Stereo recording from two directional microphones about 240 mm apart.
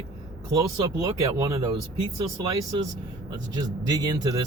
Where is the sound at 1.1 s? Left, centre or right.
Right.